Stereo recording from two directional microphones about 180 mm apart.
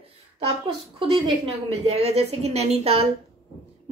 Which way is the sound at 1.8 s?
35° right (ahead or behind).